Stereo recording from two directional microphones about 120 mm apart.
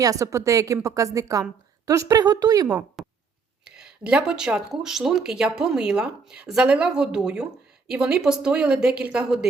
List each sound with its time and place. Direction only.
0.0 s a woman's voice: 25° right (ahead or behind)
3.0 s a sound: centre (ahead or behind)
3.8 s speech: 5° right (ahead or behind)